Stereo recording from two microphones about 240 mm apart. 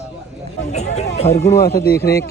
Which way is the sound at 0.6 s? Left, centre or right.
Left.